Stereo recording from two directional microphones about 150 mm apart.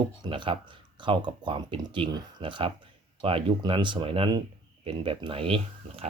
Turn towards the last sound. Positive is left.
turn(degrees=-40)  # may be behind; listen again after turning